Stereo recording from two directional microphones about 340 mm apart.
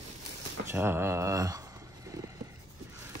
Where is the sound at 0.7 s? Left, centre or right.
Centre.